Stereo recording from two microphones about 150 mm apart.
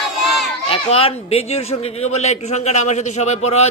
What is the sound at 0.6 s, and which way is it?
Speech, 40° left (ahead or behind).